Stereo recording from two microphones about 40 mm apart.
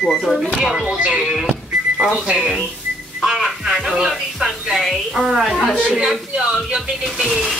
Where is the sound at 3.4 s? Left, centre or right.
Centre.